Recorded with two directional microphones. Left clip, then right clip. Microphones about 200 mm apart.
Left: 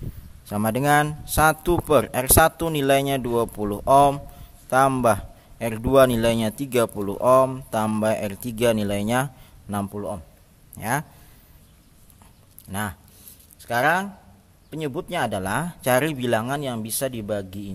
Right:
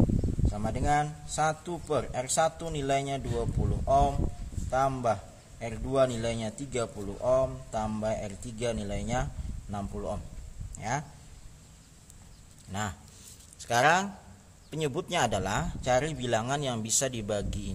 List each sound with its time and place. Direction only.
0.5 s a man's voice: 40° left (ahead or behind)
9.9 s speech: 25° left (ahead or behind)
10.8 s a man's voice: 35° left (ahead or behind)
12.7 s speech: 35° left (ahead or behind)
13.6 s speech: 20° left (ahead or behind)